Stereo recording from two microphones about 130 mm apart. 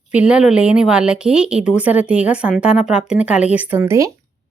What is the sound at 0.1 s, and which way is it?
Speech, 10° right (ahead or behind).